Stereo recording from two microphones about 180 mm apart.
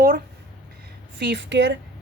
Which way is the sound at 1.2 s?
75° right (ahead or behind).